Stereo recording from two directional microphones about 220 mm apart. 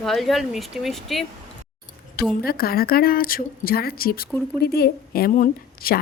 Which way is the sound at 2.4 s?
45° left (ahead or behind).